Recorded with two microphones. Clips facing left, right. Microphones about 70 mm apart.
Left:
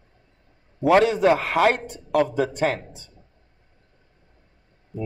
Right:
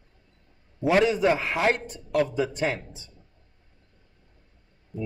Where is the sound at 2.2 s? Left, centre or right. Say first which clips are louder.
Left 3 dB; left.